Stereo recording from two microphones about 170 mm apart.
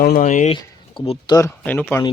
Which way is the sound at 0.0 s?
50° left (ahead or behind).